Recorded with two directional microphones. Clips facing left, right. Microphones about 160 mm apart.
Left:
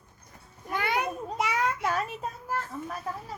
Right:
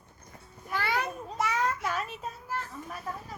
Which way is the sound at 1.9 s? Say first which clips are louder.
Left 3 dB; 45° left (ahead or behind).